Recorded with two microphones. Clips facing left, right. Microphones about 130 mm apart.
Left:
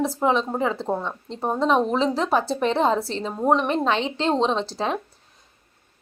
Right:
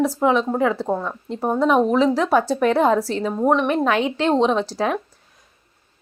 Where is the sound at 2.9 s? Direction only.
25° left (ahead or behind).